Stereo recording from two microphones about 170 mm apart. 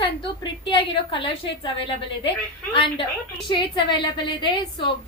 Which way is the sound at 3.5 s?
30° left (ahead or behind).